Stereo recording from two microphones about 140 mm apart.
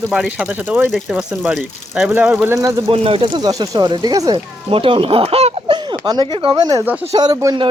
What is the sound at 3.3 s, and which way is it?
Speech, 30° right (ahead or behind).